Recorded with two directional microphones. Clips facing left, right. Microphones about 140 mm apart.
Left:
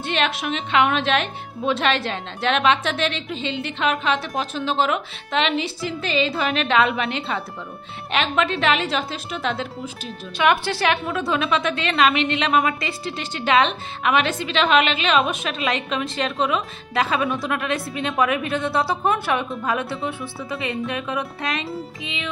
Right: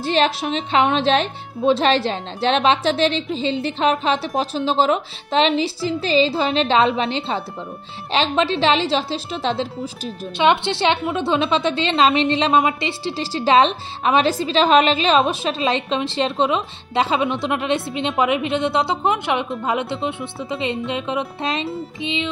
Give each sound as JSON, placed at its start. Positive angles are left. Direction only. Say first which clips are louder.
{"t": 0.0, "sound": "a woman's voice", "louder": "right 5 dB", "side_deg": -35}